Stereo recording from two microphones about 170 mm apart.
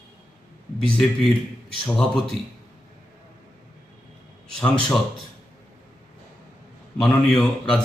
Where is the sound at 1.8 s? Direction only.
5° left (ahead or behind).